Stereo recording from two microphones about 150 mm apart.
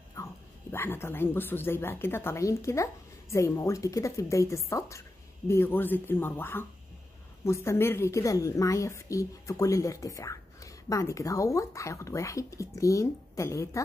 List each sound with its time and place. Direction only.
0.1 s speech: 20° left (ahead or behind)